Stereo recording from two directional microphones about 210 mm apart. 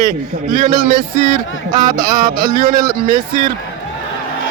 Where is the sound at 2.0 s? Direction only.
40° right (ahead or behind).